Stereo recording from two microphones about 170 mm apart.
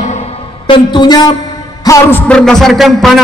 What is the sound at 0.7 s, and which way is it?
Speech, 30° left (ahead or behind).